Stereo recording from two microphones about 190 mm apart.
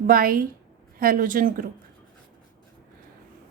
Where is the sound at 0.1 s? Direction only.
50° right (ahead or behind).